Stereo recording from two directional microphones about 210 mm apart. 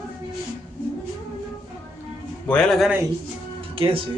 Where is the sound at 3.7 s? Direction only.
25° right (ahead or behind).